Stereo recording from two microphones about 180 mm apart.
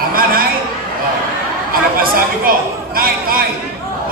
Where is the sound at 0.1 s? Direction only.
55° right (ahead or behind).